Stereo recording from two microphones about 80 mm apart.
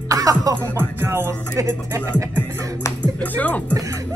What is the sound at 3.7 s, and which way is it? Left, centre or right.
Music, right.